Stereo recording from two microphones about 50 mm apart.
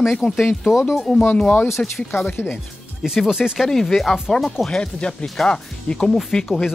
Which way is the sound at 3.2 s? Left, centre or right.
Centre.